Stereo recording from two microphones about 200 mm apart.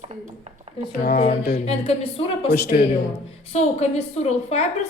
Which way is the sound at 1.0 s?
50° left (ahead or behind).